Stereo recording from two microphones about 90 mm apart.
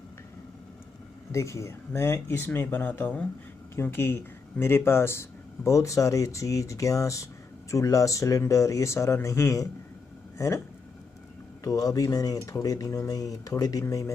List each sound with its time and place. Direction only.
1.3 s speech: 35° left (ahead or behind); by 3.3 s 15° left (ahead or behind)
3.7 s speech: 25° left (ahead or behind)
11.6 s speech: 40° left (ahead or behind)